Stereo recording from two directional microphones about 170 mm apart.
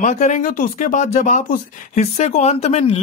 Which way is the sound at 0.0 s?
45° left (ahead or behind).